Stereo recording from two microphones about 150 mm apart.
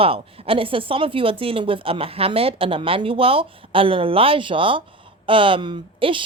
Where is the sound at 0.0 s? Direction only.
40° right (ahead or behind).